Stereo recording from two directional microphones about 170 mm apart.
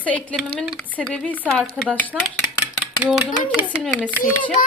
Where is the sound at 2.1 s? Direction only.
5° right (ahead or behind).